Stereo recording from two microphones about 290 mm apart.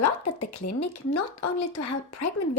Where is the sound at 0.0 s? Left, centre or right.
Left.